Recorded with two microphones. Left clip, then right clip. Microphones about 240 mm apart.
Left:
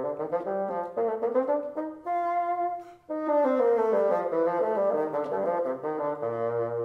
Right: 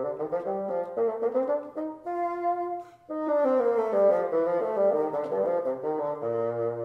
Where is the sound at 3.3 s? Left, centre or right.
Centre.